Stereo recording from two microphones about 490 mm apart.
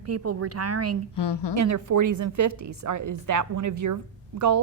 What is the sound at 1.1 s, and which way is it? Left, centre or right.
Speech, left.